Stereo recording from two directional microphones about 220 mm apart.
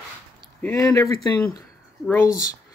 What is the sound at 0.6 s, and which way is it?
Speech, 15° left (ahead or behind).